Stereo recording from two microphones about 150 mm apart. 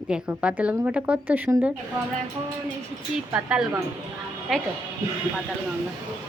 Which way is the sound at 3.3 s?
10° right (ahead or behind).